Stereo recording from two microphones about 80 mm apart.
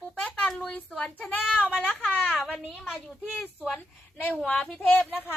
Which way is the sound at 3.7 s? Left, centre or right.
Left.